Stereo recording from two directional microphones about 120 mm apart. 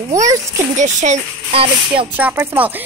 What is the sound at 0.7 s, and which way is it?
Speech, 75° right (ahead or behind).